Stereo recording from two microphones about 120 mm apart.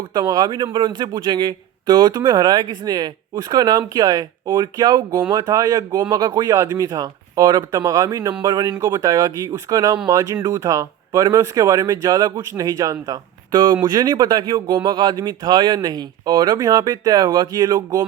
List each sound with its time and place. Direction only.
0.1 s speech: 35° right (ahead or behind)